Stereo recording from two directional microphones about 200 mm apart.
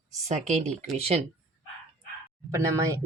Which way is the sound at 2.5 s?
15° right (ahead or behind).